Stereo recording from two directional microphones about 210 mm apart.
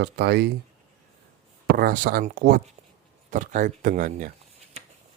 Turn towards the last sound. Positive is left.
turn(degrees=-40)  # may be behind; listen again after turning